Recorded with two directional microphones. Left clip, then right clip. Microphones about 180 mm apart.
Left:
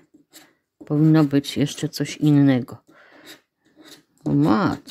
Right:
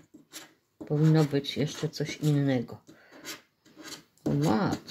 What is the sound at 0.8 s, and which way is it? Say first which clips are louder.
Speech: left 8 dB; 55° left (ahead or behind).